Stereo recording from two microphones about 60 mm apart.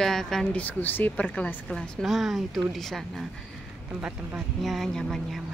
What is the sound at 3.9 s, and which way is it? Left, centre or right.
Speech, centre.